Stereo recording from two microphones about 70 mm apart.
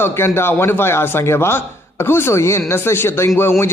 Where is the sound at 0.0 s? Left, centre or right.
Left.